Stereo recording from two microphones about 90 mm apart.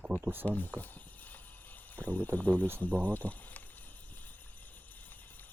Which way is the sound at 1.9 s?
15° left (ahead or behind).